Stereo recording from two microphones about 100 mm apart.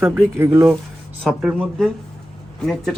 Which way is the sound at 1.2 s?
Centre (ahead or behind).